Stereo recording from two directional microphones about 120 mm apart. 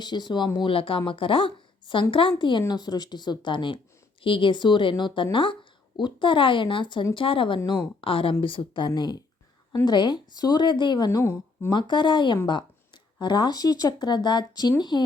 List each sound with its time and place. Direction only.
0.0 s a woman's voice: 35° left (ahead or behind)
11.2 s a woman's voice: 20° left (ahead or behind)
11.7 s a woman's voice: 40° left (ahead or behind)